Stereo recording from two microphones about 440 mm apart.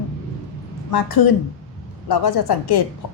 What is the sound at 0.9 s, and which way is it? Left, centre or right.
A woman's voice, left.